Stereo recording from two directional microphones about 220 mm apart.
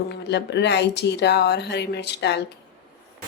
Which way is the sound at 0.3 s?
50° left (ahead or behind).